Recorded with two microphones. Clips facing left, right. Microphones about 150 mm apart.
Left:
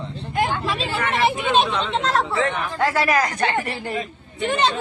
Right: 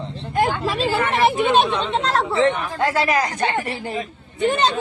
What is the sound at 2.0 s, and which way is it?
Speech, centre (ahead or behind).